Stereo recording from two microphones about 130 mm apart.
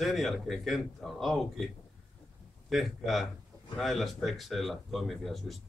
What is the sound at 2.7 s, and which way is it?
Speech, centre (ahead or behind).